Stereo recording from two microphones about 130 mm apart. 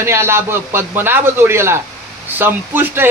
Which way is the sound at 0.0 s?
20° right (ahead or behind).